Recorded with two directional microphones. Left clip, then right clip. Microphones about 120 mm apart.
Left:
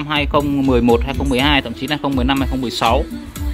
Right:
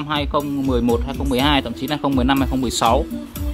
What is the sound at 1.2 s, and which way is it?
Speech, 5° right (ahead or behind).